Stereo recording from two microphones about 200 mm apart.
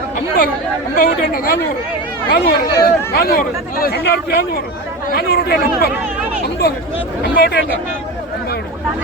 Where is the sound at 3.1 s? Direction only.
50° left (ahead or behind).